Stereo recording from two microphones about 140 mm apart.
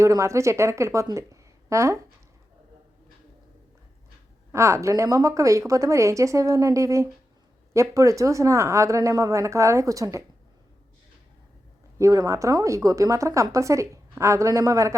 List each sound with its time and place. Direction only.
0.0 s a woman's voice: 20° right (ahead or behind)
4.5 s a woman's voice: 20° right (ahead or behind)
11.9 s a woman's voice: 20° right (ahead or behind)